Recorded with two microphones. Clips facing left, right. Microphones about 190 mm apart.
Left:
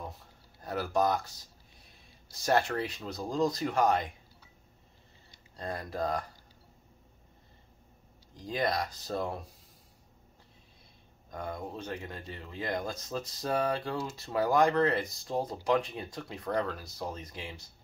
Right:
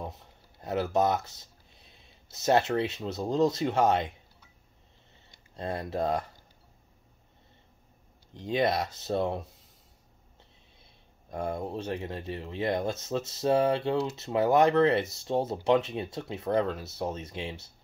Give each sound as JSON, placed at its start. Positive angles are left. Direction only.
{"t": 0.1, "sound": "speech", "side_deg": -20}
{"t": 5.6, "sound": "speech", "side_deg": -25}
{"t": 8.4, "sound": "speech", "side_deg": -25}
{"t": 11.2, "sound": "speech", "side_deg": -30}